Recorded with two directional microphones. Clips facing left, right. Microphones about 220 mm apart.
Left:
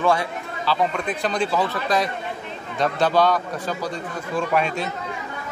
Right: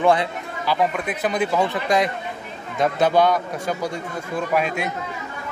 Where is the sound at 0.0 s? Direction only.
20° right (ahead or behind).